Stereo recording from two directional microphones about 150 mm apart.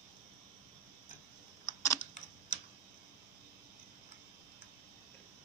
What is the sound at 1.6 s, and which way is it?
Computer keyboard, 20° left (ahead or behind).